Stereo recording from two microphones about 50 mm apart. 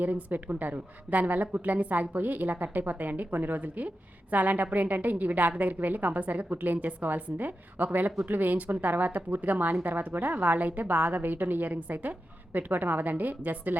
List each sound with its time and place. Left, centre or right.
0.0 s a woman's voice: right